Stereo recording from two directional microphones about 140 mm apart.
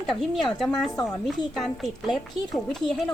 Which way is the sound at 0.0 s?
Centre (ahead or behind).